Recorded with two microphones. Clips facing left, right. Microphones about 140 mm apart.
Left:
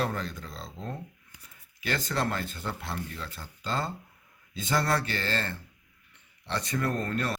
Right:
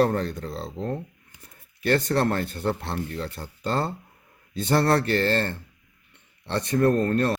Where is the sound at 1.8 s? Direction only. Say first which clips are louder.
Right 8 dB; 60° right (ahead or behind).